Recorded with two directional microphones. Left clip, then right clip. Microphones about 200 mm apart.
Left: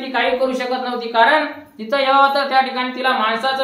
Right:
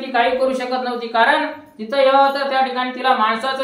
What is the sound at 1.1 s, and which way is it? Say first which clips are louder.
Female singing: left 2 dB; 15° left (ahead or behind).